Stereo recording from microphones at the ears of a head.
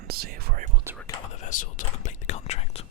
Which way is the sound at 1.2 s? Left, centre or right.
Left.